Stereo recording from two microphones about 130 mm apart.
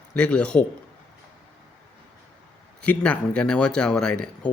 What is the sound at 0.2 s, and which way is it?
Speech, 10° left (ahead or behind).